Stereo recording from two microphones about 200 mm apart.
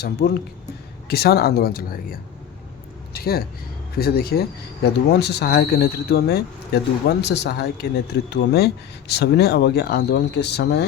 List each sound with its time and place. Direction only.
0.0 s a man's voice: 55° left (ahead or behind)